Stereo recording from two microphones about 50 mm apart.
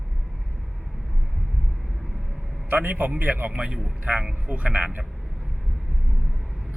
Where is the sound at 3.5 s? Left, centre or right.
Right.